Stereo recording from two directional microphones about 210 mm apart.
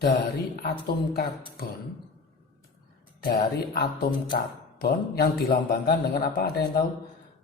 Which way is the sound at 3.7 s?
45° left (ahead or behind).